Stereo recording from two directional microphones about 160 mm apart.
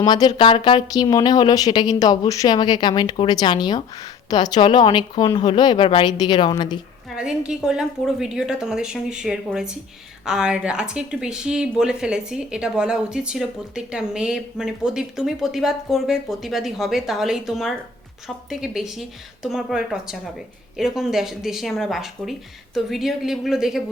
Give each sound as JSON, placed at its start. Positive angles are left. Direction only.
{"t": 0.0, "sound": "speech", "side_deg": 25}
{"t": 7.2, "sound": "speech", "side_deg": -5}